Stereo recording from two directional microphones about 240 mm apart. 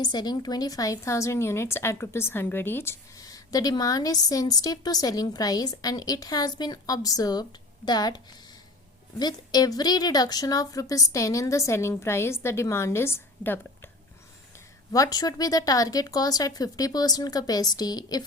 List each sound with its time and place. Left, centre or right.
0.0 s a woman's voice: centre
14.9 s a woman's voice: centre